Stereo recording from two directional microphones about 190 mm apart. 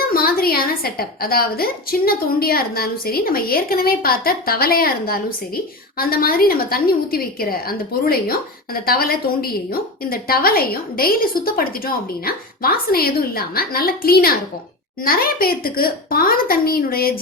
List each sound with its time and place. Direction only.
0.0 s a woman's voice: 50° left (ahead or behind)